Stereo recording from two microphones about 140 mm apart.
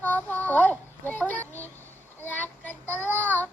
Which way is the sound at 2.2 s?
15° left (ahead or behind).